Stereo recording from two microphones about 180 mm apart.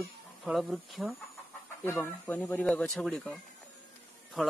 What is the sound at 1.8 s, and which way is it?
A man's voice, 10° left (ahead or behind).